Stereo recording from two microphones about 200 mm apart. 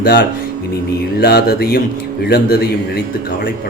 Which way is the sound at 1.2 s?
50° left (ahead or behind).